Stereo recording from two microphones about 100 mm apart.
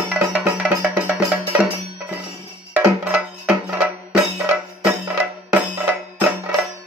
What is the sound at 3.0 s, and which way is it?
Music, 15° right (ahead or behind).